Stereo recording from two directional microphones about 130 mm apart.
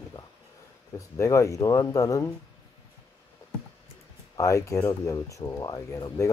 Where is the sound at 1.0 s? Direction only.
25° left (ahead or behind).